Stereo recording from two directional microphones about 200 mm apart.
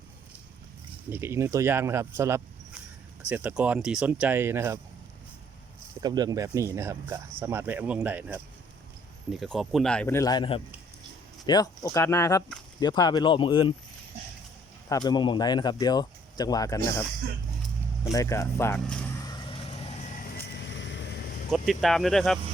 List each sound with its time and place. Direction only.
1.1 s speech: 10° right (ahead or behind)
6.0 s speech: 20° right (ahead or behind); by 13.7 s 25° left (ahead or behind)
14.8 s speech: 20° left (ahead or behind)
18.1 s speech: 15° left (ahead or behind)
19.5 s vehicle: 30° left (ahead or behind)
20.1 s vehicle: 55° left (ahead or behind)
21.5 s speech: centre (ahead or behind)